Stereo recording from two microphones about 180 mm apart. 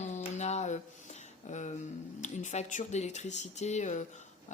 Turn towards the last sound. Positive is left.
turn(degrees=40)  # may be behind; listen again after turning